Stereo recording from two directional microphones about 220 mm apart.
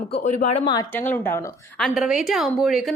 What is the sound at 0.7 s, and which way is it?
Speech, 15° left (ahead or behind).